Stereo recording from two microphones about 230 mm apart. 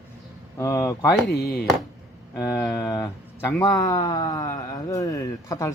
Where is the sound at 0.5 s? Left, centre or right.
Centre.